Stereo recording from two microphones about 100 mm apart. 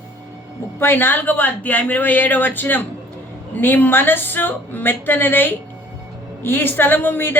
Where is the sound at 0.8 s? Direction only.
20° left (ahead or behind).